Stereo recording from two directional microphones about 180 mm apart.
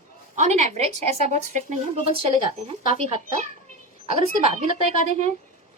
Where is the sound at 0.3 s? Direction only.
40° right (ahead or behind).